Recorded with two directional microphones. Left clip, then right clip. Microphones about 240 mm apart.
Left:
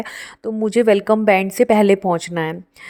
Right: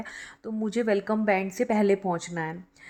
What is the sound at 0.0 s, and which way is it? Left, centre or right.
A woman's voice, left.